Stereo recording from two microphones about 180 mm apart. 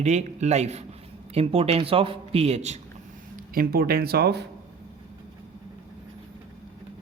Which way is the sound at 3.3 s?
55° right (ahead or behind).